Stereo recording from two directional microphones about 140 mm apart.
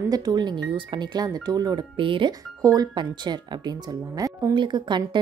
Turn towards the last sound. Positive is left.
turn(degrees=-35)  # may be behind; listen again after turning